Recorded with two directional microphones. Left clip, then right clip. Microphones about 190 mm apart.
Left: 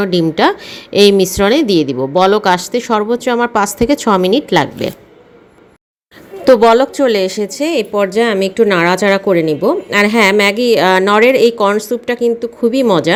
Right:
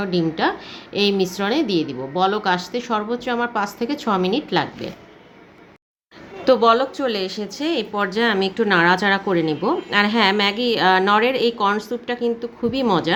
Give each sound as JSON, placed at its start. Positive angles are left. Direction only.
{"t": 0.0, "sound": "a woman's voice", "side_deg": 40}
{"t": 6.4, "sound": "a woman's voice", "side_deg": 35}